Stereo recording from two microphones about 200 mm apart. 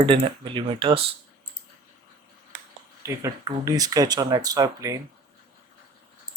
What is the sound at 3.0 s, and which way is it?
Speech, 15° right (ahead or behind).